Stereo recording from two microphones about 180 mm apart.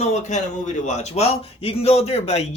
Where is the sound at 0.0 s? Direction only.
40° left (ahead or behind).